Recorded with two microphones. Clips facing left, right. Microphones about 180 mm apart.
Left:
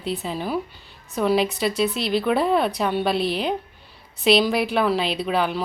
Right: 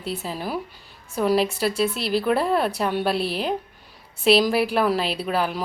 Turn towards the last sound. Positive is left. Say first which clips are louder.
# left 1 dB
turn(degrees=-5)  # may be behind; listen again after turning